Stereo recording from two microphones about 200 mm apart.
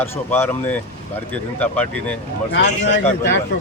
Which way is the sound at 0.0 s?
10° left (ahead or behind).